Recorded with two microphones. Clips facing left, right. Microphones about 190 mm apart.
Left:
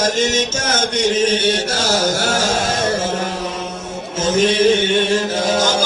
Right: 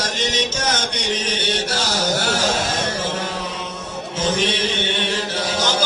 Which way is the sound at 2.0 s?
45° left (ahead or behind).